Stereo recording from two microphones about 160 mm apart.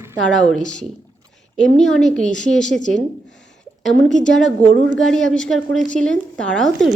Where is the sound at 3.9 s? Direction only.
5° left (ahead or behind).